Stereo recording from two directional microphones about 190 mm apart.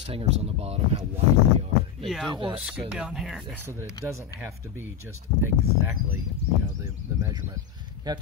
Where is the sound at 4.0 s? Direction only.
20° left (ahead or behind).